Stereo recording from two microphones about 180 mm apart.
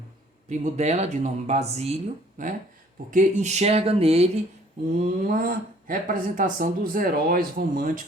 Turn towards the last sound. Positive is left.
turn(degrees=-55)  # may be behind; listen again after turning